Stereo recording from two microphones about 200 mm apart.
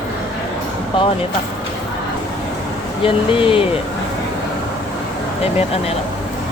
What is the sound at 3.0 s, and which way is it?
Speech, 25° left (ahead or behind).